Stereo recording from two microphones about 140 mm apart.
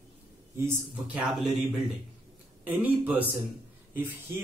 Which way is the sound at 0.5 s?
20° right (ahead or behind).